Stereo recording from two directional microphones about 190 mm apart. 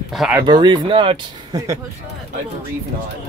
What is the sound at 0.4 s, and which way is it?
Speech, 25° right (ahead or behind).